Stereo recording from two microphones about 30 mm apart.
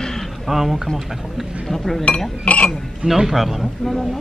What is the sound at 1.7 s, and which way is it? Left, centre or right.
Speech, centre.